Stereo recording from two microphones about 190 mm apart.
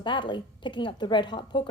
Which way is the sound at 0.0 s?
25° left (ahead or behind).